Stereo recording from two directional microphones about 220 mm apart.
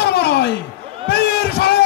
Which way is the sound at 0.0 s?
45° left (ahead or behind).